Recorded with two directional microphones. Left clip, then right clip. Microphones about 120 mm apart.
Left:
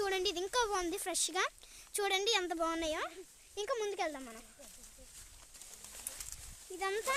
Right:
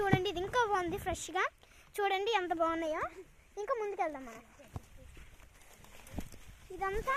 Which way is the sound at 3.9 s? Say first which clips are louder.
Right 2 dB; 35° left (ahead or behind).